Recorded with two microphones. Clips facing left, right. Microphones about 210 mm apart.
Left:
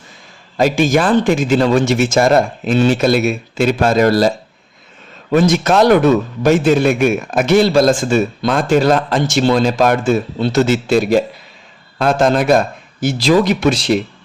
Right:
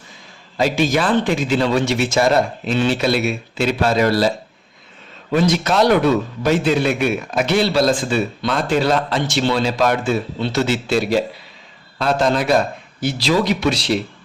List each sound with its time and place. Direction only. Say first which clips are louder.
0.5 s a man's voice: left 4 dB; 50° left (ahead or behind)
5.3 s a man's voice: left 4 dB; 50° left (ahead or behind)